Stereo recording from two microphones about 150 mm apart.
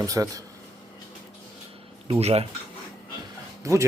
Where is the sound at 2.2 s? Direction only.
40° right (ahead or behind).